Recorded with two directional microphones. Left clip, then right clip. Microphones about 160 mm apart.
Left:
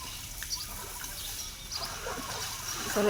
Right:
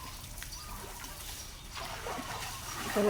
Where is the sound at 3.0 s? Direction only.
15° right (ahead or behind).